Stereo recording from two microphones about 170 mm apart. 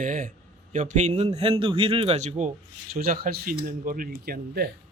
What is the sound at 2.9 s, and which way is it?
Speech, 60° right (ahead or behind).